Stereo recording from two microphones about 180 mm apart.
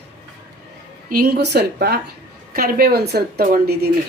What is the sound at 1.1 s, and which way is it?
A woman's voice, 60° right (ahead or behind).